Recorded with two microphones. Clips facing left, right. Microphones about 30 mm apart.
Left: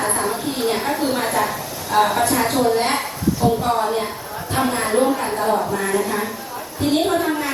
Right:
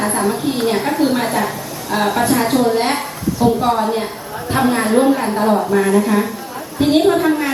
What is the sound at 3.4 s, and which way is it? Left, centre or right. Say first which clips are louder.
A woman's voice: right 5 dB; right.